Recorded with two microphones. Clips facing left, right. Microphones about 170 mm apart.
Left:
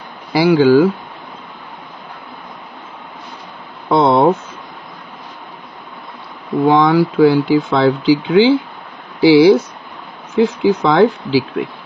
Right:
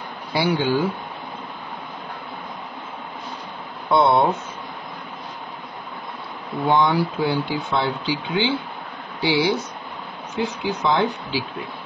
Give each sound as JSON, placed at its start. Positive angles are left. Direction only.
{"t": 0.3, "sound": "speech", "side_deg": 90}
{"t": 3.9, "sound": "a sound", "side_deg": 90}
{"t": 6.7, "sound": "speech", "side_deg": 90}